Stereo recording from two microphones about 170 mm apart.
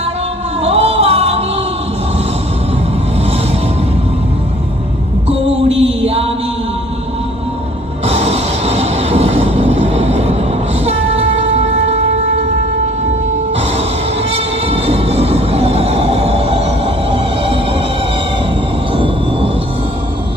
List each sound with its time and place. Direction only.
0.6 s a sound: 35° right (ahead or behind)
5.6 s music: 35° right (ahead or behind)
8.0 s train: 40° right (ahead or behind)
10.8 s a sound: 35° right (ahead or behind)
13.5 s music: 35° right (ahead or behind)
18.9 s vehicle: 30° right (ahead or behind)